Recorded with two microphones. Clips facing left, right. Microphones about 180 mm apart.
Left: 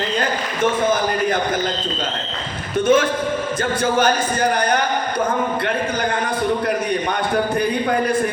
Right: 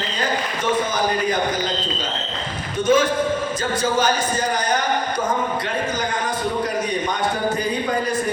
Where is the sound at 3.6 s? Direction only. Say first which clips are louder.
Left 4 dB; 55° left (ahead or behind).